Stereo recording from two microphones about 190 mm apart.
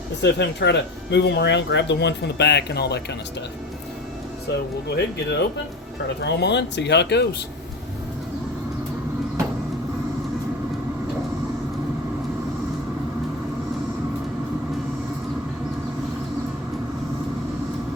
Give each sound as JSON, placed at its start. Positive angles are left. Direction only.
{"t": 0.2, "sound": "speech", "side_deg": 65}
{"t": 4.5, "sound": "speech", "side_deg": 60}